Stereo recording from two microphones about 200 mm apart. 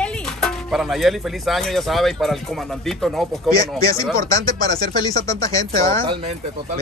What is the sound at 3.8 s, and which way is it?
Speech, 15° left (ahead or behind).